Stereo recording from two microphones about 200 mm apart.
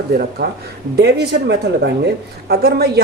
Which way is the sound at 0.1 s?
50° right (ahead or behind).